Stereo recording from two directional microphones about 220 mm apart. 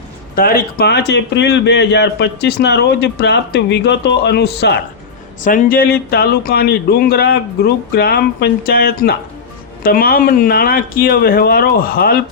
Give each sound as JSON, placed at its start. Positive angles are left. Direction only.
{"t": 0.3, "sound": "a man's voice", "side_deg": 40}
{"t": 5.4, "sound": "a man's voice", "side_deg": 35}